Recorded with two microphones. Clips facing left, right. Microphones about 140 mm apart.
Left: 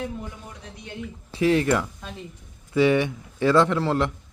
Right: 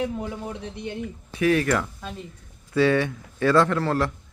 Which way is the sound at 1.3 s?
25° left (ahead or behind).